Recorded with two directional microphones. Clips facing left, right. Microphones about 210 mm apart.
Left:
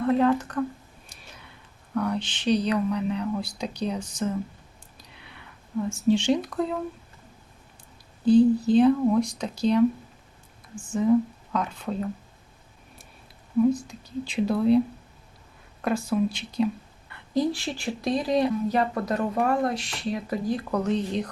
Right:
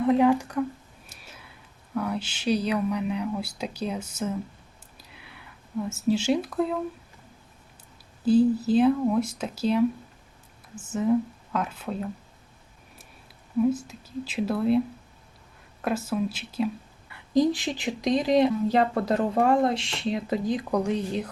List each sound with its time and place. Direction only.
0.0 s a sound: 15° right (ahead or behind)
2.0 s speech: 5° right (ahead or behind)
4.9 s a sound: 5° right (ahead or behind)
8.2 s speech: 5° right (ahead or behind)
13.6 s speech: 5° right (ahead or behind)
15.8 s speech: 5° right (ahead or behind)
17.1 s speech: 15° right (ahead or behind)